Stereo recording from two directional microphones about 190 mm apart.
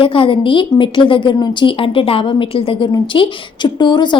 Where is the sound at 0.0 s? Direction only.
30° left (ahead or behind).